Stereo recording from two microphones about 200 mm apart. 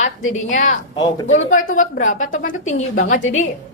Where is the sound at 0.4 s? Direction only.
40° left (ahead or behind).